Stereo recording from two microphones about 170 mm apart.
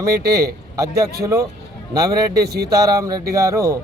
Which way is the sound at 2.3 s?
70° right (ahead or behind).